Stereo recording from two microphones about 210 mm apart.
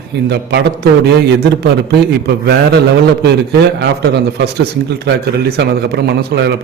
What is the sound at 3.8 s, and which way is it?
Speech, 50° right (ahead or behind).